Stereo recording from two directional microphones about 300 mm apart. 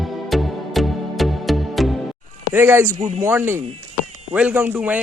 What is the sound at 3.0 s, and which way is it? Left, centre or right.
Speech, right.